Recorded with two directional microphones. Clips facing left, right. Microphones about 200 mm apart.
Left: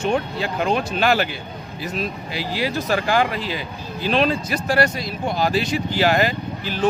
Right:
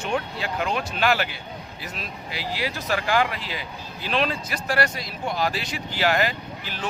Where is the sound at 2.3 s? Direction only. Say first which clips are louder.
Left 5 dB; 35° left (ahead or behind).